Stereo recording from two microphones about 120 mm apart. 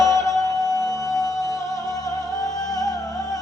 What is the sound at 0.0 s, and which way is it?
Music, 25° left (ahead or behind).